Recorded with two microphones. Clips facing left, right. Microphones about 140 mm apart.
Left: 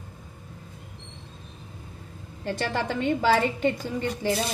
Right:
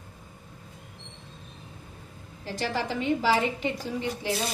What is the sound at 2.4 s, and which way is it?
A woman's voice, 55° left (ahead or behind).